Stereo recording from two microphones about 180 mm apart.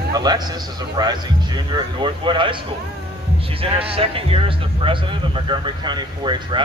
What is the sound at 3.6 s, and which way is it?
A man's voice, 30° right (ahead or behind).